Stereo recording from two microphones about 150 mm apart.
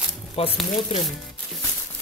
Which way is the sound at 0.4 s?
40° left (ahead or behind).